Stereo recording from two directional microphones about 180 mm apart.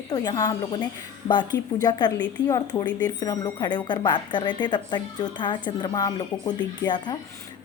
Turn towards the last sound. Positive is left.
turn(degrees=25)  # may be behind; listen again after turning